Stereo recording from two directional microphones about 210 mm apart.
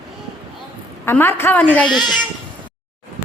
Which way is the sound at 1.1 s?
10° left (ahead or behind).